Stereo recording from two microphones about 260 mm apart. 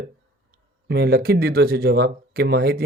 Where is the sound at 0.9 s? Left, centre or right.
Right.